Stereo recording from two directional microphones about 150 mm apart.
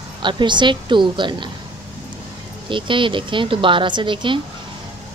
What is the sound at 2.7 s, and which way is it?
A woman's voice, 35° right (ahead or behind).